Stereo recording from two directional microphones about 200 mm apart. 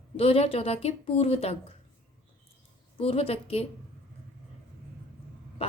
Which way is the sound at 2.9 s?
30° left (ahead or behind).